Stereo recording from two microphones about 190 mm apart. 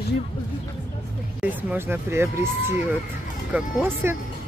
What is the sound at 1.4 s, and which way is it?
Speech, 10° right (ahead or behind).